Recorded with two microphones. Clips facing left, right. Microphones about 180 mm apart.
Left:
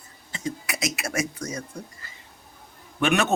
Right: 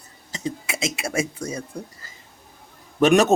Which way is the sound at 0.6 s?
25° right (ahead or behind).